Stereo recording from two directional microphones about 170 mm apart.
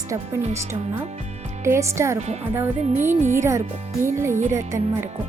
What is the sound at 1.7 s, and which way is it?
Speech, 15° right (ahead or behind).